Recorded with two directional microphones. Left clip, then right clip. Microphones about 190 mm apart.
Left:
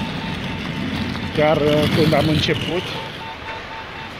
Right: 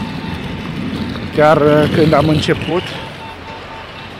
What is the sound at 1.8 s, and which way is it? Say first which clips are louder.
Speech: right 5 dB; 40° left (ahead or behind).